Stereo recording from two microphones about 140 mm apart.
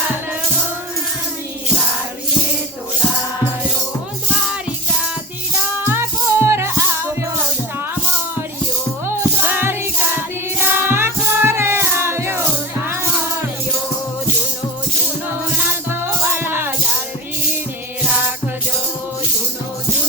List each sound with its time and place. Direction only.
5.8 s music: 15° right (ahead or behind)
9.0 s music: 15° right (ahead or behind)
15.5 s music: 15° right (ahead or behind)